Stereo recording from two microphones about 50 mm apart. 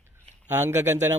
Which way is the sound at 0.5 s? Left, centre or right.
Right.